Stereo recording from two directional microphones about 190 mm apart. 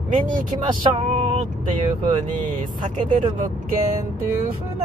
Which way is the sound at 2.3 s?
40° right (ahead or behind).